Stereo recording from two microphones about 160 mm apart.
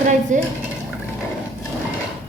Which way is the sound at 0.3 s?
50° right (ahead or behind).